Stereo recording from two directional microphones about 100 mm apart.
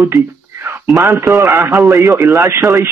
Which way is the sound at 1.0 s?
30° right (ahead or behind).